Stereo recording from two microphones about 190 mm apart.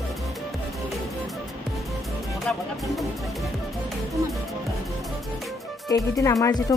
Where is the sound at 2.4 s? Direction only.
Centre (ahead or behind).